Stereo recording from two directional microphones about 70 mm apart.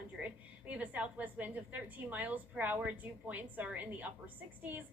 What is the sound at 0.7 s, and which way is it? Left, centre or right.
A woman's voice, right.